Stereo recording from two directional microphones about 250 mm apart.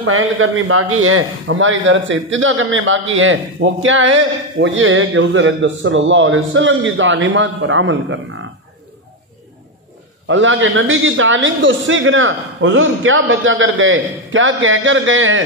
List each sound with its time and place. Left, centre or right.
0.0 s a man's voice: right
10.2 s a man's voice: right